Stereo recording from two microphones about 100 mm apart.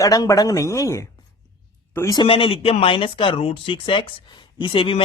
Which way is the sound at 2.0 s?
45° left (ahead or behind).